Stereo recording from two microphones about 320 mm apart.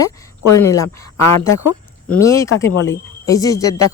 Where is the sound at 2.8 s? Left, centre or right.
Centre.